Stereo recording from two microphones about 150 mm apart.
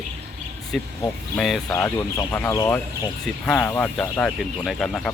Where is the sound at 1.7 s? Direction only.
20° left (ahead or behind).